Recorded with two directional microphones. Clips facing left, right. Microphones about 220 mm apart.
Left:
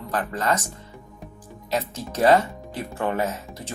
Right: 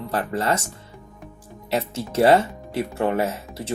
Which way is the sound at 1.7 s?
25° right (ahead or behind).